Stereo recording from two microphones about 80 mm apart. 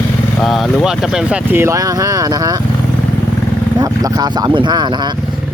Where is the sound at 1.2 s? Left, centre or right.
Centre.